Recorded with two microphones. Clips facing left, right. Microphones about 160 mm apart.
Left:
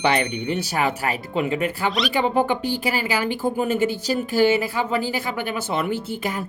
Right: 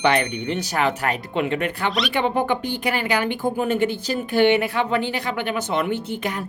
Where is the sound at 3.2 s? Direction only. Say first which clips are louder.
Even; 55° right (ahead or behind).